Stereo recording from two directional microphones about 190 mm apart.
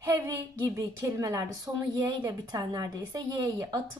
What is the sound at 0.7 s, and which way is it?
Speech, 15° right (ahead or behind).